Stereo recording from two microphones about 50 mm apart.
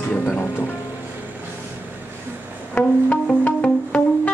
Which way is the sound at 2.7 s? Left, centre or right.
Left.